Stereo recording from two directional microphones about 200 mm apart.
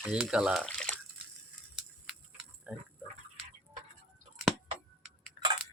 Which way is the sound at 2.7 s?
5° right (ahead or behind).